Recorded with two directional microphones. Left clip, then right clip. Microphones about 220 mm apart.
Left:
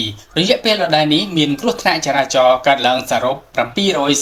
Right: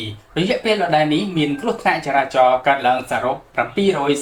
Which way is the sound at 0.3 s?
35° left (ahead or behind).